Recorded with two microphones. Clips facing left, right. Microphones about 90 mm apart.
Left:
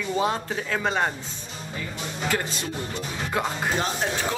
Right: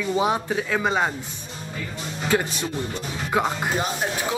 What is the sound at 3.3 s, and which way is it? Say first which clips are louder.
A man's voice: right 4 dB; 15° right (ahead or behind).